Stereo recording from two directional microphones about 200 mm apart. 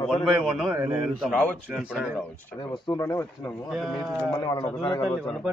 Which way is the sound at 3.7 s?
Centre (ahead or behind).